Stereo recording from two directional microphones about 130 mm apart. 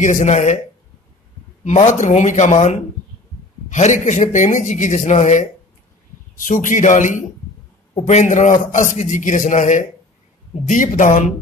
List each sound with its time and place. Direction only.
0.0 s a man's voice: 70° left (ahead or behind)
1.6 s speech: 60° left (ahead or behind)
3.6 s a man's voice: 70° left (ahead or behind)
6.3 s a man's voice: 80° left